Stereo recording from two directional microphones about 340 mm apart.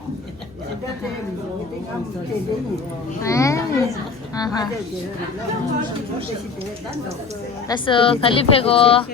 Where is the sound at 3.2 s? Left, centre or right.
Centre.